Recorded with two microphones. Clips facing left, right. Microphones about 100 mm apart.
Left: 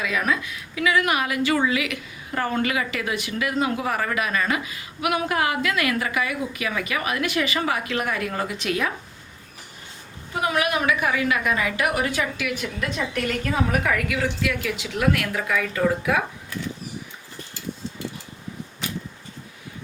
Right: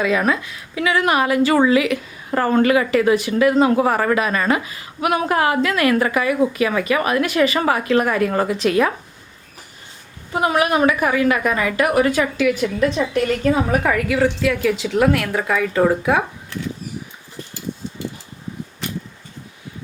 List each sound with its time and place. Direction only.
0.0 s a woman's voice: 35° right (ahead or behind)
10.3 s a woman's voice: 35° right (ahead or behind)
13.4 s a woman's voice: 30° right (ahead or behind)
15.5 s a woman's voice: 35° right (ahead or behind)